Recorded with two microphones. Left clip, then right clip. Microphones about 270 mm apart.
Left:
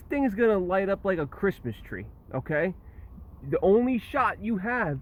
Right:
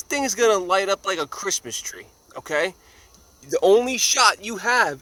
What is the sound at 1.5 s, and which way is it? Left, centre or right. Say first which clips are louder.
Speech: right 10 dB; centre.